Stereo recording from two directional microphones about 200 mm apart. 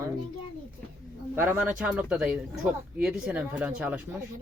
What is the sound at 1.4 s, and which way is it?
Speech, 10° right (ahead or behind).